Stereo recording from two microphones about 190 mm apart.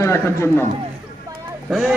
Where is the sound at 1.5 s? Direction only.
5° right (ahead or behind).